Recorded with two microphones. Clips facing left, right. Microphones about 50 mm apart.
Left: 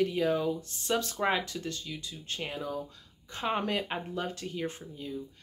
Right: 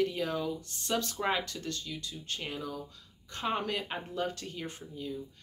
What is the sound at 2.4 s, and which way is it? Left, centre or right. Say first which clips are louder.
Speech: left 4 dB; centre.